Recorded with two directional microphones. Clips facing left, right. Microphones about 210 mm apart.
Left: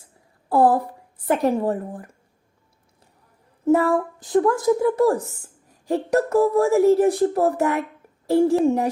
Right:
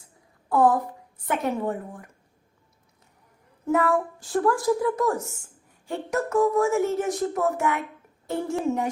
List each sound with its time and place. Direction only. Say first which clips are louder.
0.4 s a woman's voice: left 3 dB; 30° left (ahead or behind)
3.7 s speech: left 5 dB; 25° left (ahead or behind)